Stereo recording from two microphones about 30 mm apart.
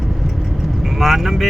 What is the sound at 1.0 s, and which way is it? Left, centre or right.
Mantra, centre.